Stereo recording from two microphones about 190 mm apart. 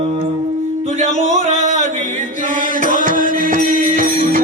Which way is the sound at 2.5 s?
45° left (ahead or behind).